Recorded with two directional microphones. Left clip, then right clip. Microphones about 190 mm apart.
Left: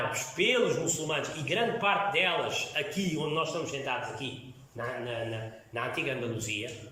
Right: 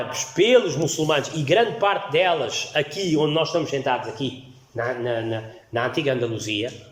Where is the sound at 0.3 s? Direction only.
40° right (ahead or behind).